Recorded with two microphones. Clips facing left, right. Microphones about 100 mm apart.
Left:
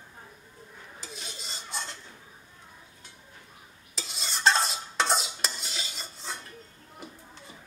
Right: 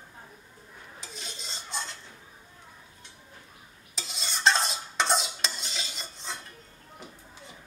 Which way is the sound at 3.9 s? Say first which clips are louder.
Even; centre (ahead or behind).